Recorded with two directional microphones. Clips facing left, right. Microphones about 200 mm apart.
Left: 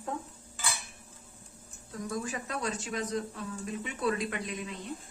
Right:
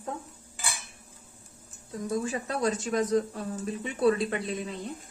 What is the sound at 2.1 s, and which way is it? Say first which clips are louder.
Speech: right 6 dB; 30° right (ahead or behind).